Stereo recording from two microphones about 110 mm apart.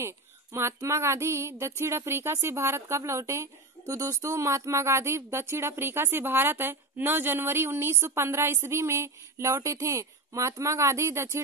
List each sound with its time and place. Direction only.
0.0 s female singing: 25° right (ahead or behind)